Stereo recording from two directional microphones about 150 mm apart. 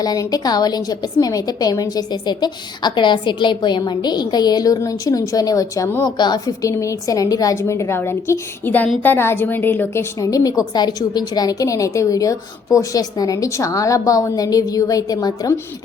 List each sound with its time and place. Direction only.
0.0 s a woman's voice: 25° left (ahead or behind)